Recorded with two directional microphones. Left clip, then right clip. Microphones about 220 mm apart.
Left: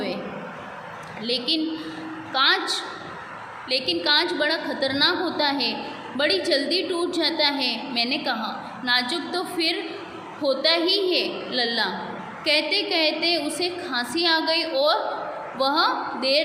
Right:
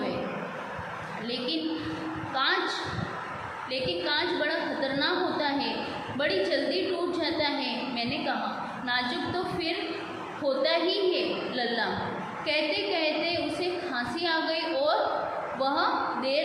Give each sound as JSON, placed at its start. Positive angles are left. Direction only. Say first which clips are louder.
{"t": 2.3, "sound": "a woman's voice", "louder": "left 7 dB", "side_deg": 50}